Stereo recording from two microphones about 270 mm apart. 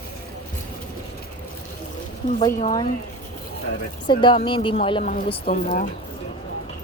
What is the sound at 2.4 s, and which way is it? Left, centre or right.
Speech, centre.